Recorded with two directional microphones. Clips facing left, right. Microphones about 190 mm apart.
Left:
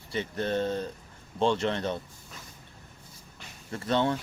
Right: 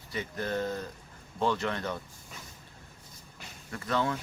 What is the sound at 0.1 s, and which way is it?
Speech, 25° left (ahead or behind).